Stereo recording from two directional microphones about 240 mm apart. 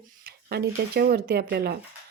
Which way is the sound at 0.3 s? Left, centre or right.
Right.